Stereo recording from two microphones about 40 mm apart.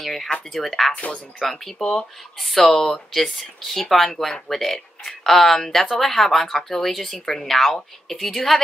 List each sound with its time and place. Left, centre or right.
0.0 s speech: centre
0.9 s speech: left
1.4 s speech: centre
1.8 s speech: left
2.3 s speech: centre